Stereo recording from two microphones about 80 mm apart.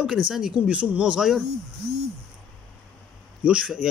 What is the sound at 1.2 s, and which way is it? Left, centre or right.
Speech, centre.